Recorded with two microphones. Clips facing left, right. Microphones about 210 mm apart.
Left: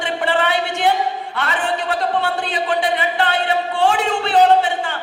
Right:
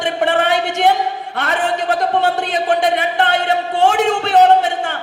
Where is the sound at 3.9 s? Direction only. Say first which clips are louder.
Right 3 dB; 45° right (ahead or behind).